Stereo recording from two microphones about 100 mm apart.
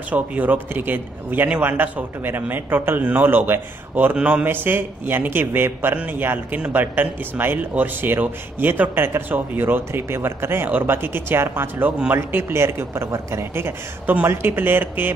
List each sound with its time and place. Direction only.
0.1 s a man's voice: 15° right (ahead or behind)